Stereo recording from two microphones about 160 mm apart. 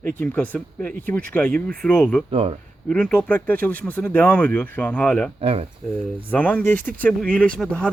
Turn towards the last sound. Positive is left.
turn(degrees=5)  # may be behind; listen again after turning